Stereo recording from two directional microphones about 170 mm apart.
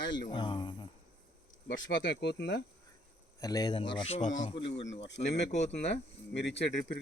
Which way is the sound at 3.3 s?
20° left (ahead or behind).